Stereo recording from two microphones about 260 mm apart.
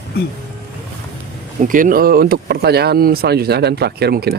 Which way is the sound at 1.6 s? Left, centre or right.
Right.